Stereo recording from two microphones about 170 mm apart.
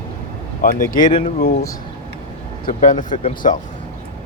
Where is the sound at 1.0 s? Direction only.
35° left (ahead or behind).